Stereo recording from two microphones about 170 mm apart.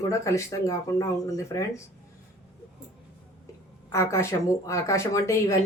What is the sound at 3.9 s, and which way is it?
A woman's voice, 15° left (ahead or behind).